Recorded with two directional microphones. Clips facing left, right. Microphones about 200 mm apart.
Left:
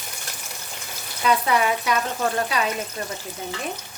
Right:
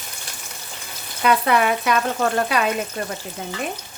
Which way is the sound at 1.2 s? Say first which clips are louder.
Right 3 dB; 65° right (ahead or behind).